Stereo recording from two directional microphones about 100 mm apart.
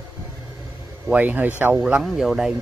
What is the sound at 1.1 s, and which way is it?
Speech, 15° right (ahead or behind).